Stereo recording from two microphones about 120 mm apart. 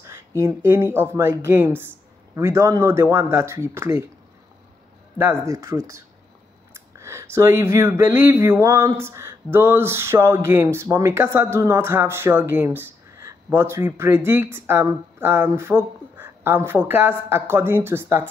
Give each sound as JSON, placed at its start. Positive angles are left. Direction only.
{"t": 0.0, "sound": "a sound", "side_deg": -25}
{"t": 0.7, "sound": "speech", "side_deg": -20}
{"t": 5.1, "sound": "speech", "side_deg": -20}